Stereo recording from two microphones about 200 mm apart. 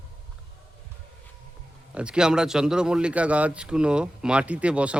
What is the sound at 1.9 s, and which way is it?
Speech, 5° right (ahead or behind).